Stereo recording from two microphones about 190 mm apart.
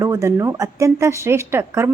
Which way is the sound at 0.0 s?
15° right (ahead or behind).